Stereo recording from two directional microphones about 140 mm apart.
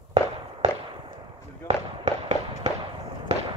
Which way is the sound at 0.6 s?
50° right (ahead or behind).